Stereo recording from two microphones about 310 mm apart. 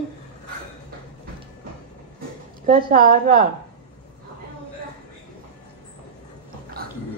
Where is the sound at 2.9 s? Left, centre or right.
Right.